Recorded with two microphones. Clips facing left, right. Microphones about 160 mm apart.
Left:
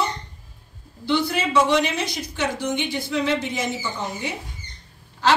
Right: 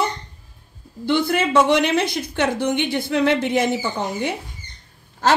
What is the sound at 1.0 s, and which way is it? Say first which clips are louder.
A woman's voice: right 3 dB; 50° right (ahead or behind).